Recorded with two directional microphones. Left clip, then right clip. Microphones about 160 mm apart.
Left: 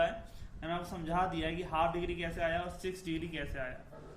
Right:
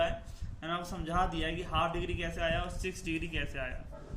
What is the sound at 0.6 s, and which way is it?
A man's voice, 15° right (ahead or behind).